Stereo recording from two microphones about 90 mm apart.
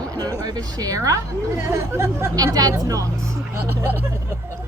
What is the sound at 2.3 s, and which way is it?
Speech, 45° right (ahead or behind).